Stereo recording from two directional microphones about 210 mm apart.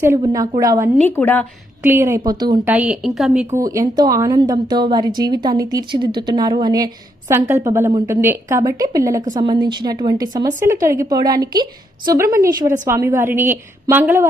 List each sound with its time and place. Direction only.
0.0 s a woman's voice: 15° right (ahead or behind)
1.2 s speech: 10° left (ahead or behind)
1.8 s a woman's voice: 10° right (ahead or behind)
2.6 s a woman's voice: 5° right (ahead or behind)
3.5 s a woman's voice: 15° right (ahead or behind)